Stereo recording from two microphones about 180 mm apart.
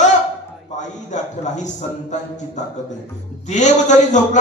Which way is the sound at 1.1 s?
40° left (ahead or behind).